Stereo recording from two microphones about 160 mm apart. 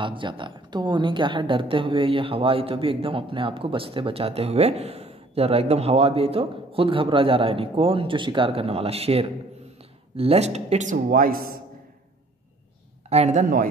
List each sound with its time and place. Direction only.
0.0 s a woman's voice: 30° right (ahead or behind); by 11.5 s 65° right (ahead or behind)
13.1 s speech: 45° right (ahead or behind)